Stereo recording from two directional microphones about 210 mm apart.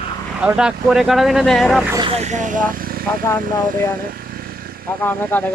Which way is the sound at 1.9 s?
25° right (ahead or behind).